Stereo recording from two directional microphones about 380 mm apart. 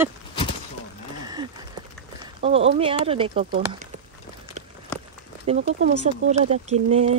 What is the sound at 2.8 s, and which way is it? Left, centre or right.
Speech, centre.